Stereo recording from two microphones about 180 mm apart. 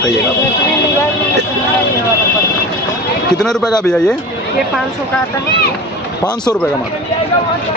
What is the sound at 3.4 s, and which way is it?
Speech, 5° left (ahead or behind).